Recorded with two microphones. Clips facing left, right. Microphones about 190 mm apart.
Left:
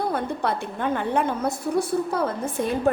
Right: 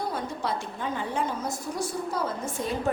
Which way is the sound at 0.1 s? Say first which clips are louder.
Left 5 dB; 60° left (ahead or behind).